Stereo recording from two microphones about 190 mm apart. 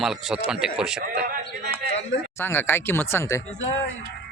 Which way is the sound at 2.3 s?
10° left (ahead or behind).